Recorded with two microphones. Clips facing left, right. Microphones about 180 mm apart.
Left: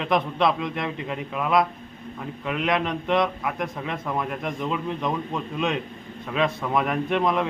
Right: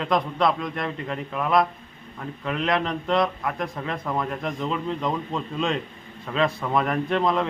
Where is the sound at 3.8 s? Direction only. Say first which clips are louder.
Right 1 dB; 5° left (ahead or behind).